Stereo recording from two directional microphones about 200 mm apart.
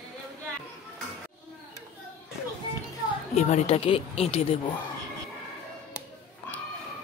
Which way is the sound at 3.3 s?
35° left (ahead or behind).